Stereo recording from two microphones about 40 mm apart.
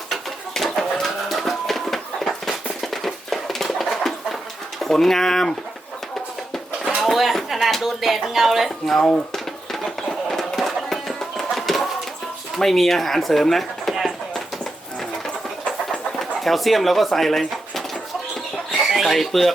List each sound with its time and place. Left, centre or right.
0.1 s bird: centre
1.3 s music: centre
2.8 s dog: centre
4.8 s speech: centre
7.0 s speech: centre
9.3 s music: centre
12.5 s speech: centre
16.4 s speech: centre
18.9 s speech: centre